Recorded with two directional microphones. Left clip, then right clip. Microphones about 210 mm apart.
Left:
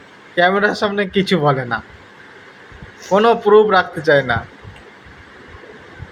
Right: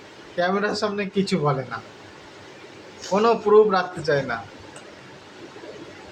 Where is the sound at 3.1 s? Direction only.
35° left (ahead or behind).